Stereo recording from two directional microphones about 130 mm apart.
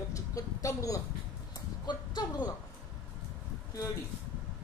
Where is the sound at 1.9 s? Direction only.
35° left (ahead or behind).